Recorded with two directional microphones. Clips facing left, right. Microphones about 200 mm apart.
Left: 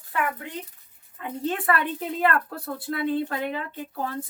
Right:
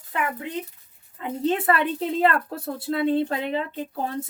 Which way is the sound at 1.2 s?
25° right (ahead or behind).